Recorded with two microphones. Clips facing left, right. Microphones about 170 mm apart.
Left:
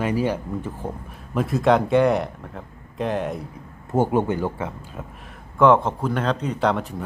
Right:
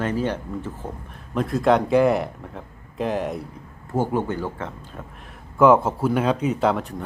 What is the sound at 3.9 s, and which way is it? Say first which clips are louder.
Speech: left 3 dB; 20° left (ahead or behind).